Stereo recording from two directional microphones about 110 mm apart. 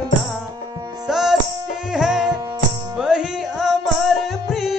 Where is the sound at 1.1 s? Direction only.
5° right (ahead or behind).